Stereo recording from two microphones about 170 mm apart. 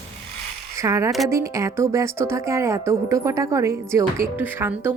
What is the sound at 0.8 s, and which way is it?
Speech, 15° right (ahead or behind).